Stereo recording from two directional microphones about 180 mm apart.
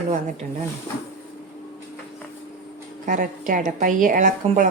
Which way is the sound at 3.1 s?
45° right (ahead or behind).